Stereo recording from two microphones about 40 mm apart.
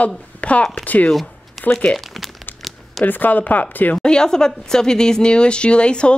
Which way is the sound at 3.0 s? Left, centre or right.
Left.